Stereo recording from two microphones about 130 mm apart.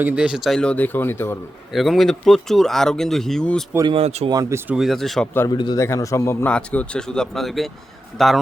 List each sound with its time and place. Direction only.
0.0 s speech: 5° right (ahead or behind); by 1.4 s 15° left (ahead or behind)
1.7 s speech: centre (ahead or behind)
3.8 s speech: 50° right (ahead or behind)
4.3 s speech: 25° right (ahead or behind)
4.7 s speech: centre (ahead or behind)
5.5 s a man's voice: 35° left (ahead or behind)
5.8 s a man's voice: 25° left (ahead or behind)
6.5 s speech: 10° left (ahead or behind)